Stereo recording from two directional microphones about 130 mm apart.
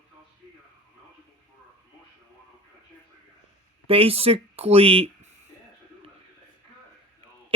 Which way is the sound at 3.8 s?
45° right (ahead or behind).